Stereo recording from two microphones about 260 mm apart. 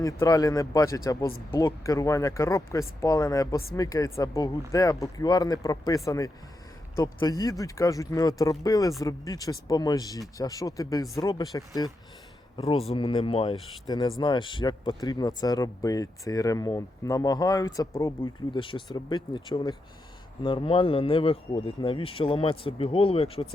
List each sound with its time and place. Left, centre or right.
0.0 s speech: centre